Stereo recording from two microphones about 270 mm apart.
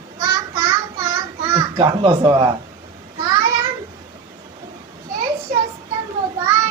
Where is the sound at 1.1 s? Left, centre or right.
Centre.